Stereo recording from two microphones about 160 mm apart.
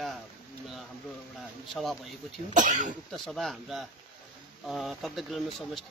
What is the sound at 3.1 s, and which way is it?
Speech, 5° left (ahead or behind).